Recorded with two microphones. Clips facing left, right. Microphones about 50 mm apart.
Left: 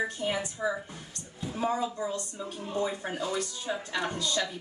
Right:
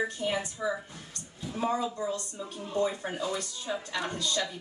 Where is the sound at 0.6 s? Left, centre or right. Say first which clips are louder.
Left 1 dB; left.